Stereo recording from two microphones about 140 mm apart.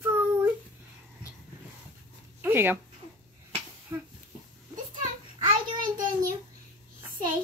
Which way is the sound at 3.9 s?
20° right (ahead or behind).